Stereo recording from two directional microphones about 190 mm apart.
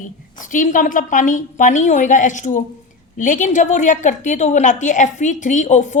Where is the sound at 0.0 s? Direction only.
45° left (ahead or behind).